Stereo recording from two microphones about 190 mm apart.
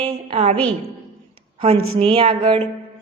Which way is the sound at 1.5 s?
30° right (ahead or behind).